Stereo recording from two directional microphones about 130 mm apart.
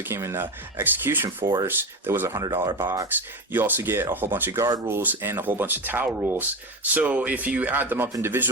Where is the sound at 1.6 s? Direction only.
15° right (ahead or behind).